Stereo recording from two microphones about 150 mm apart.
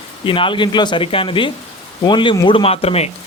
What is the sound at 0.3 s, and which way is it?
Speech, 35° left (ahead or behind).